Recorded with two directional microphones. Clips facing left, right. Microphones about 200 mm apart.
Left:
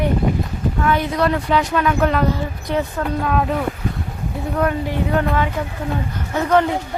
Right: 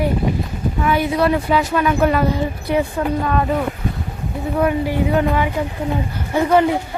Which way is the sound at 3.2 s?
Centre (ahead or behind).